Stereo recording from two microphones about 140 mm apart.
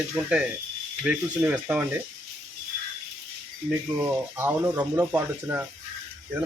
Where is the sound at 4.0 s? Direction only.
15° right (ahead or behind).